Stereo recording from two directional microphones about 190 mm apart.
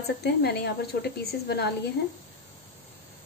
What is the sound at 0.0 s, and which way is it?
Speech, 60° left (ahead or behind).